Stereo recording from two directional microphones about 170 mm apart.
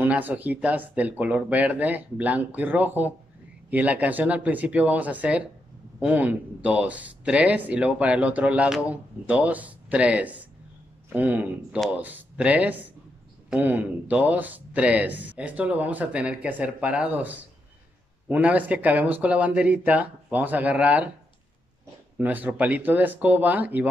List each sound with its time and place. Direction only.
0.0 s speech: 10° right (ahead or behind)
22.1 s speech: 10° right (ahead or behind)